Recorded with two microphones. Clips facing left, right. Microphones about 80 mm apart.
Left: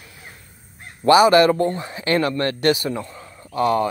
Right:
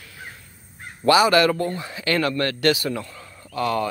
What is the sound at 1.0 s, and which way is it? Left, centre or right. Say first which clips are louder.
Speech: left 4 dB; left.